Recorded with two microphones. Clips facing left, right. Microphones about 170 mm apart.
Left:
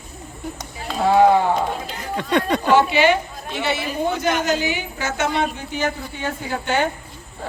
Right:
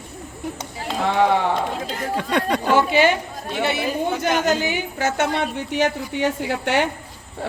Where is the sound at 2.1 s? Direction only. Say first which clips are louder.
Left 2 dB; 5° right (ahead or behind).